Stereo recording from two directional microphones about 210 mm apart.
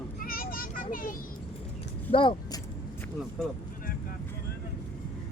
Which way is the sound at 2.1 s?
25° left (ahead or behind).